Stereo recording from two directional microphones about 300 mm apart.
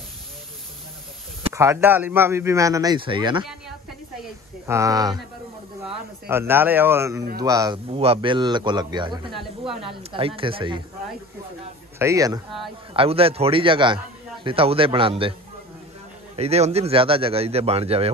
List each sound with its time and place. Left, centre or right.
1.4 s a man's voice: centre
4.6 s a man's voice: centre
6.2 s a man's voice: centre
9.3 s speech: centre
9.8 s a man's voice: centre
12.0 s a man's voice: centre
16.3 s a man's voice: right